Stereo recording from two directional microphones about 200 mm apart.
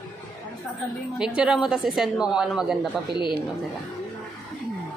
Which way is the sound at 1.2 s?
5° right (ahead or behind).